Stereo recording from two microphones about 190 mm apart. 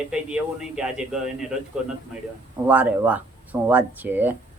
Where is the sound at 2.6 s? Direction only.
10° right (ahead or behind).